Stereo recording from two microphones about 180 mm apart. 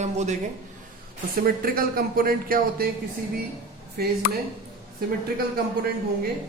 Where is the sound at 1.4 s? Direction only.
55° right (ahead or behind).